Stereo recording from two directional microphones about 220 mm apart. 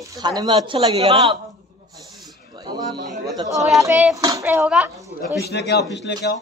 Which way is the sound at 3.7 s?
15° right (ahead or behind).